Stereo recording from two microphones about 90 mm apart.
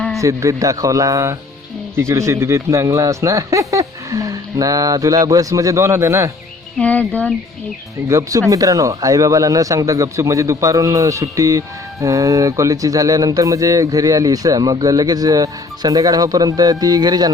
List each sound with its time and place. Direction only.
0.2 s speech: 35° right (ahead or behind)
6.7 s speech: 15° left (ahead or behind)
8.0 s speech: 35° right (ahead or behind)